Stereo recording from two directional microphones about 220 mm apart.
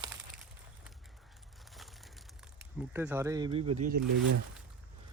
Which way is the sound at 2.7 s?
5° right (ahead or behind).